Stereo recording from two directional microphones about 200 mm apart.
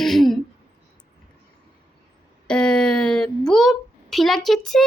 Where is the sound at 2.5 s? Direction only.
5° left (ahead or behind).